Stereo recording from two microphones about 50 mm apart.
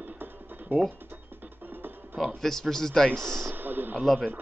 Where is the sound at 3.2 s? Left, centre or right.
Right.